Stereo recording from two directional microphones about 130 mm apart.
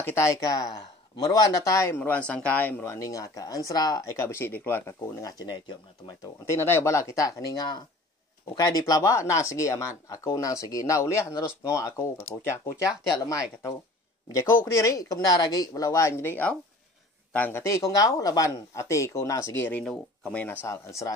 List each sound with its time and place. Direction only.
0.0 s speech: 20° left (ahead or behind)
5.4 s speech: 35° left (ahead or behind)
6.4 s speech: 20° left (ahead or behind)